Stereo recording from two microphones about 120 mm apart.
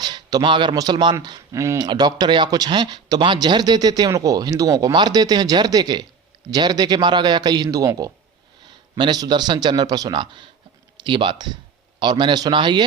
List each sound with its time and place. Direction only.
0.0 s a man's voice: 35° right (ahead or behind)
1.5 s speech: 25° right (ahead or behind)
1.8 s speech: 35° right (ahead or behind)